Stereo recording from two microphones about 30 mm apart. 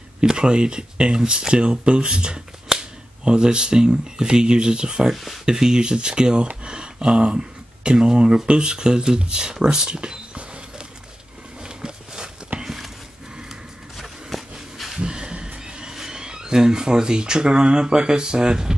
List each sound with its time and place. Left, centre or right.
0.2 s speech: right
2.7 s cap gun: centre
3.3 s speech: right
5.1 s speech: centre
5.4 s speech: right
9.9 s rodents: right
11.6 s a sound: right
12.5 s a sound: right
13.9 s a sound: centre
15.0 s a sound: right
15.6 s train: right
16.0 s speech: right